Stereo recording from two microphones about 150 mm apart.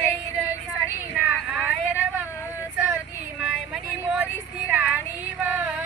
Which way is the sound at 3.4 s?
5° right (ahead or behind).